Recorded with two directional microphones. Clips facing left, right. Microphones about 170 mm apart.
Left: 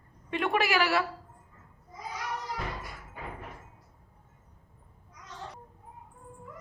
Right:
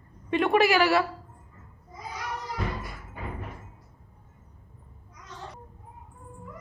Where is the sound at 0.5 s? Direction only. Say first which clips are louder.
Right 5 dB; centre (ahead or behind).